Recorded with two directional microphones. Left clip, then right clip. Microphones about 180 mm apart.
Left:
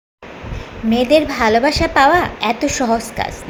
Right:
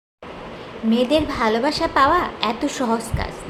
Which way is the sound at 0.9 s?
10° left (ahead or behind).